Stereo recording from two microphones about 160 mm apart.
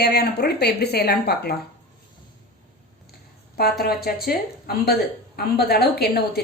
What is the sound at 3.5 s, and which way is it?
A woman's voice, 75° left (ahead or behind).